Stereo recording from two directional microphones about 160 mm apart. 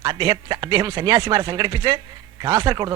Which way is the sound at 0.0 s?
30° right (ahead or behind).